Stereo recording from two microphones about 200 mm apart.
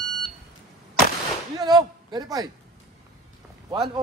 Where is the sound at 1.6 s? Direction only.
20° right (ahead or behind).